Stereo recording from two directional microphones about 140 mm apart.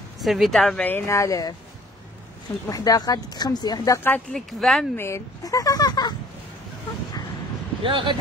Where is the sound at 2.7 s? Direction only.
25° left (ahead or behind).